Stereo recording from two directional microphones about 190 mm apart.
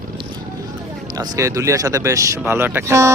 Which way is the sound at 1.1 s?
15° right (ahead or behind).